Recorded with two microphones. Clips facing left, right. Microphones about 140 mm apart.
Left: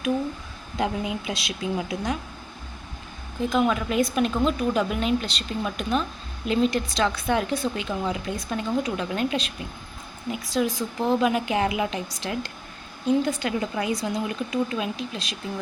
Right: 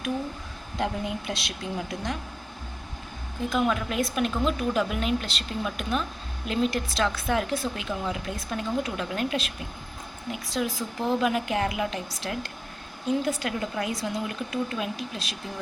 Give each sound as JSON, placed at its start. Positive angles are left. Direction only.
{"t": 0.8, "sound": "speech", "side_deg": 5}
{"t": 3.5, "sound": "speech", "side_deg": 0}